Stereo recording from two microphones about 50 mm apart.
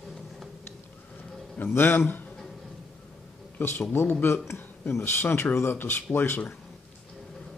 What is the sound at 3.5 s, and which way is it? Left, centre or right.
Speech, left.